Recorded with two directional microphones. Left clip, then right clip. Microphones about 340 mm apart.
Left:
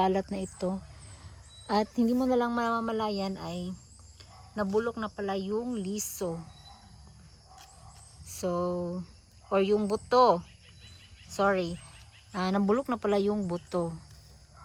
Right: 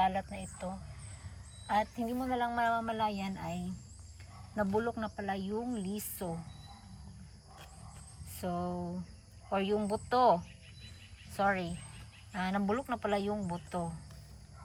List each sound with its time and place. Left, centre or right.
0.0 s speech: centre
4.5 s speech: centre
8.3 s a sound: centre
9.5 s speech: centre
11.3 s speech: centre